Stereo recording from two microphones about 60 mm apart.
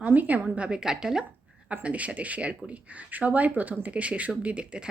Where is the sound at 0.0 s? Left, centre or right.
Right; by 1.2 s centre.